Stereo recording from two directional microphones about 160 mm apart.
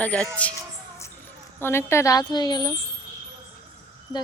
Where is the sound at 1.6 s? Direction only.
15° left (ahead or behind).